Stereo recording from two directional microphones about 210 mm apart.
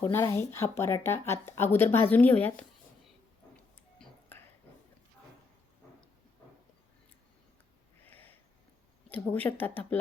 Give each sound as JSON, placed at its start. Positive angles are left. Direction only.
{"t": 0.0, "sound": "speech", "side_deg": 10}
{"t": 3.9, "sound": "a sound", "side_deg": 10}
{"t": 8.0, "sound": "sniff", "side_deg": 10}
{"t": 9.0, "sound": "speech", "side_deg": 10}